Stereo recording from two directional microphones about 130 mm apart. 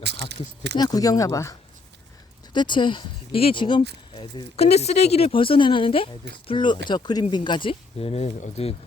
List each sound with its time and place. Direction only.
0.8 s speech: 30° left (ahead or behind)
2.5 s speech: 35° left (ahead or behind); by 8.7 s 55° left (ahead or behind)